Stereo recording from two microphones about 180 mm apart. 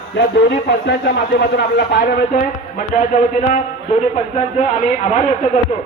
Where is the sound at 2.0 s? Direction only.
50° left (ahead or behind).